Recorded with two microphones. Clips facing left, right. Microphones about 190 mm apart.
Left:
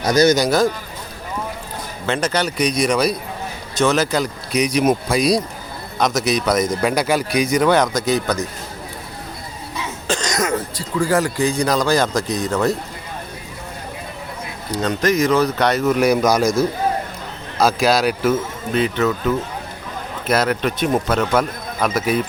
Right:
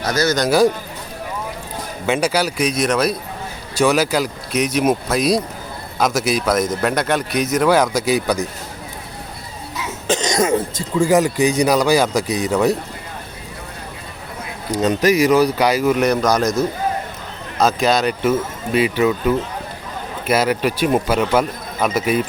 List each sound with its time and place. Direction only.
0.0 s speech: 15° left (ahead or behind)
2.0 s speech: 10° right (ahead or behind)
10.1 s a man's voice: 20° right (ahead or behind)
14.8 s a man's voice: 15° right (ahead or behind); by 16.5 s 5° left (ahead or behind)
17.6 s speech: centre (ahead or behind)